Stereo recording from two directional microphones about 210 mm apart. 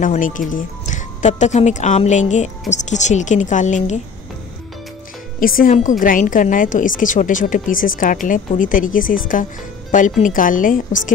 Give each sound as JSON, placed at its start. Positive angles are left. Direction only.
{"t": 0.0, "sound": "a woman's voice", "side_deg": 40}
{"t": 5.4, "sound": "a woman's voice", "side_deg": 40}